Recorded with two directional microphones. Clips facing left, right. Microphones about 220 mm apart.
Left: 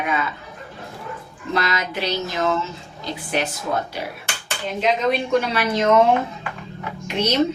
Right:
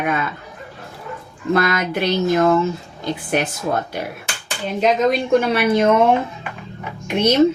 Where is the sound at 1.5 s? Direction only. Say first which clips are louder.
Right 6 dB; 50° right (ahead or behind).